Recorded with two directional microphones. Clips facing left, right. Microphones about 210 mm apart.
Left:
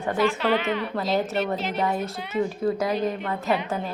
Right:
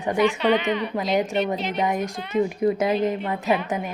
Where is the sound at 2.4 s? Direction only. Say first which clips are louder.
Right 3 dB; 20° right (ahead or behind).